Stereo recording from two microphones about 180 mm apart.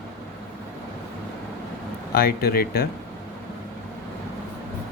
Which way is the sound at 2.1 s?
55° left (ahead or behind).